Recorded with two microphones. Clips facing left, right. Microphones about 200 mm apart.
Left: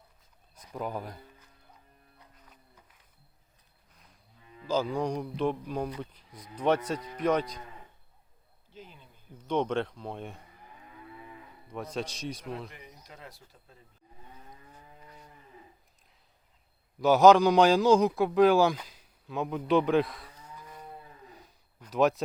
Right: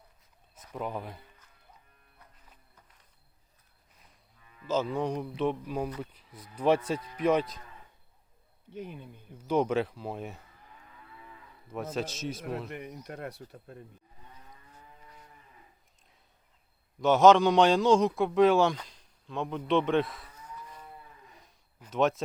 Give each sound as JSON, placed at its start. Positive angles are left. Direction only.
{"t": 0.7, "sound": "a man's voice", "side_deg": 0}
{"t": 4.4, "sound": "cattle", "side_deg": 25}
{"t": 4.7, "sound": "a man's voice", "side_deg": -5}
{"t": 8.7, "sound": "speech", "side_deg": -65}
{"t": 9.5, "sound": "a man's voice", "side_deg": -5}
{"t": 11.7, "sound": "a man's voice", "side_deg": -5}
{"t": 12.7, "sound": "speech", "side_deg": -60}
{"t": 17.0, "sound": "a man's voice", "side_deg": 0}
{"t": 21.4, "sound": "a sound", "side_deg": 0}